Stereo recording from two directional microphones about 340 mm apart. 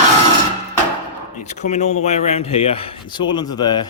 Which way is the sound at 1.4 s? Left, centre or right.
Left.